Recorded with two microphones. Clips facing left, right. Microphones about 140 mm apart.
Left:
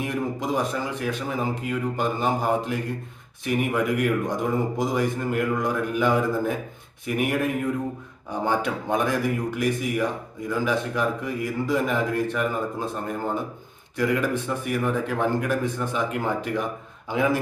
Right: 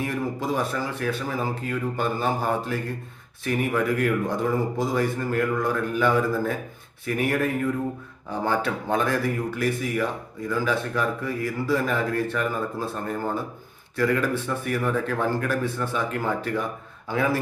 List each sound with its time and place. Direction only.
0.0 s a man's voice: 15° left (ahead or behind)